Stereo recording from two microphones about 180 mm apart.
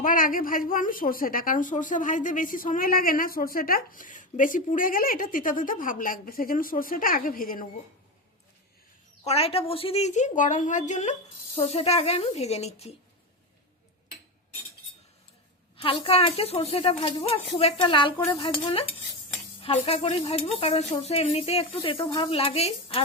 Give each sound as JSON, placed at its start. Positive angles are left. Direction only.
{"t": 0.0, "sound": "a woman's voice", "side_deg": 50}
{"t": 9.2, "sound": "a woman's voice", "side_deg": 35}
{"t": 15.8, "sound": "a woman's voice", "side_deg": 30}